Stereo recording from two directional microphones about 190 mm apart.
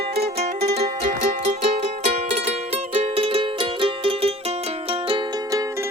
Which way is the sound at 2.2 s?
35° right (ahead or behind).